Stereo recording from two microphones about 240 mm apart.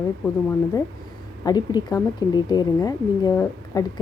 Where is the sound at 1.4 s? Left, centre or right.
Centre.